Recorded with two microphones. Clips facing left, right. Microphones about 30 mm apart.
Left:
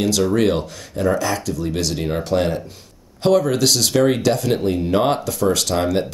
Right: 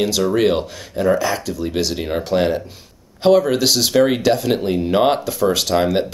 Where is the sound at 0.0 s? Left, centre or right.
Centre.